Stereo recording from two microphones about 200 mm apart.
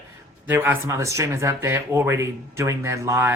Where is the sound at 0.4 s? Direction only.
10° right (ahead or behind).